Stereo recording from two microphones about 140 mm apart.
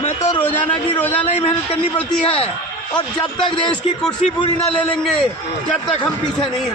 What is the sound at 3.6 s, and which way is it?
A man's voice, 5° left (ahead or behind).